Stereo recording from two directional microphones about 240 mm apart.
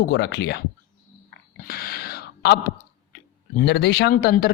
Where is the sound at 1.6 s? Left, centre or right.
Left.